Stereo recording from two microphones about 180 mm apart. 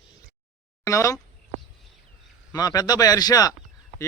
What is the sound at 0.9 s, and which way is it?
Speech, 20° left (ahead or behind).